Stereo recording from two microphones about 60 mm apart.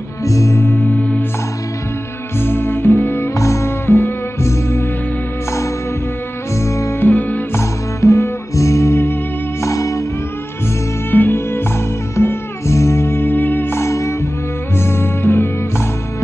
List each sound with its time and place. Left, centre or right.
0.2 s music: left
0.7 s music: left
2.4 s music: left
3.3 s music: left
3.8 s music: left
4.4 s music: left
6.6 s music: left
7.0 s music: left
7.5 s music: left
11.1 s music: left
12.2 s music: left